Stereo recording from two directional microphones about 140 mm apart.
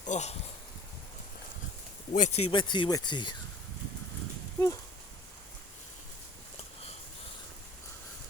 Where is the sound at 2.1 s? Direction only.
55° left (ahead or behind); by 3.3 s 35° left (ahead or behind).